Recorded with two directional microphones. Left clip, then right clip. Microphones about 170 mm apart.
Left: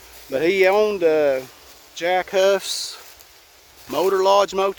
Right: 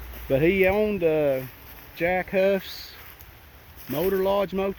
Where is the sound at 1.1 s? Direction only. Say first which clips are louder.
Left 5 dB; 35° left (ahead or behind).